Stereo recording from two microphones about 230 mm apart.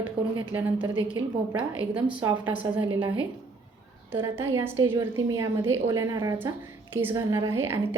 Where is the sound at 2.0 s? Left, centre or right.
Centre.